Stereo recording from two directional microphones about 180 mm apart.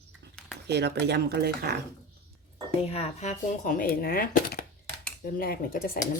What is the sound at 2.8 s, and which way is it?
Speech, 35° left (ahead or behind).